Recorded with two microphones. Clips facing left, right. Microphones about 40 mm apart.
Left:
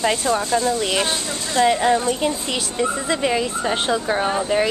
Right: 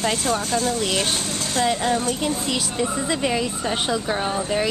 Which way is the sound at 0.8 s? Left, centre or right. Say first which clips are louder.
Left 2 dB; left.